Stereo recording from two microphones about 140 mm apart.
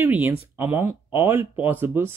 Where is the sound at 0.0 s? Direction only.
15° right (ahead or behind).